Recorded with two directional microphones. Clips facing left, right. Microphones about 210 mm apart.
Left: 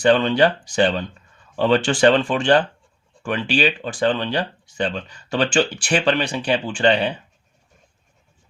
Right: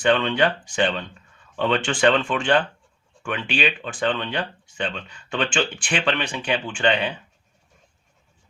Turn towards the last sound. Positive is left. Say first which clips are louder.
# left 4 dB
turn(degrees=35)  # may be behind; listen again after turning